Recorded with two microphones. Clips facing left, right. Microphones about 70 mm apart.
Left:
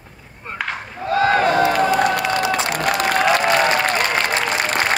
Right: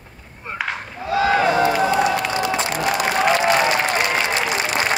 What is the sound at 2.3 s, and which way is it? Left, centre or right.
Applause, left.